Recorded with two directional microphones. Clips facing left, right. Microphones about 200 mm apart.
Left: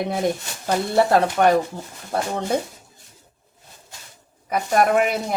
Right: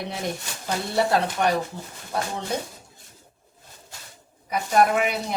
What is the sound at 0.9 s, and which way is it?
Speech, 55° left (ahead or behind).